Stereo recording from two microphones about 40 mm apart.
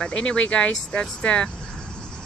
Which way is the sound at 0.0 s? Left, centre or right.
Left.